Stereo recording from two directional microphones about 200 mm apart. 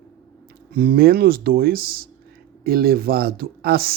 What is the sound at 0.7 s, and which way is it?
Speech, 50° right (ahead or behind).